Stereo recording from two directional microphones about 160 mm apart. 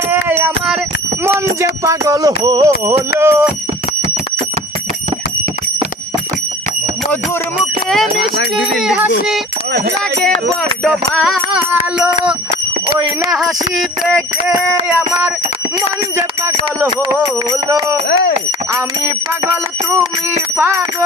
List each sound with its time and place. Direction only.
0.1 s music: 10° right (ahead or behind)
1.2 s speech: 15° right (ahead or behind)
7.6 s music: centre (ahead or behind)
11.7 s speech: 10° right (ahead or behind)
13.3 s music: centre (ahead or behind)
14.8 s speech: 10° right (ahead or behind)
16.1 s speech: 20° right (ahead or behind)
18.1 s speech: 90° left
18.7 s speech: 15° right (ahead or behind)